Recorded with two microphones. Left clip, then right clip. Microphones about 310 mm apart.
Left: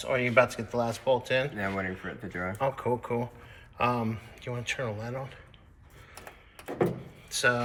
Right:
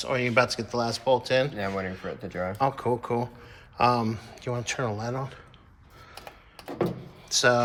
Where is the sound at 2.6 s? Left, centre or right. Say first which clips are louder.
Right 3 dB; centre.